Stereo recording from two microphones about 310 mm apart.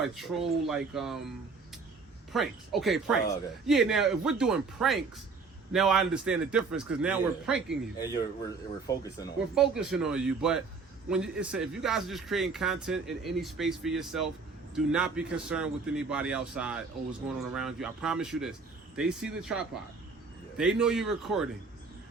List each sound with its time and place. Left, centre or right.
0.0 s speech: centre
2.3 s speech: centre
7.9 s speech: centre
9.6 s speech: centre